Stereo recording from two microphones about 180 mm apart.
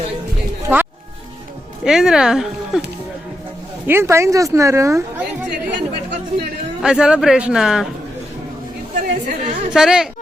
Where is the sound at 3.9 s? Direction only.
15° right (ahead or behind).